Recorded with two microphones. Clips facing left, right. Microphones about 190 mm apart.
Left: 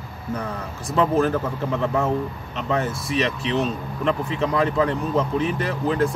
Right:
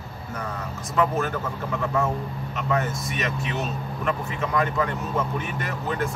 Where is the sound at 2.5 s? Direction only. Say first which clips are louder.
Left 2 dB; 30° left (ahead or behind).